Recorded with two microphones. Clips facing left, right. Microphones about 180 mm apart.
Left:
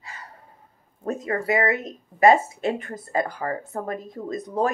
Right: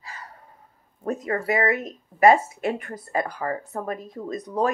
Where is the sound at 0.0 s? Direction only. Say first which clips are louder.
Right 1 dB; 25° left (ahead or behind).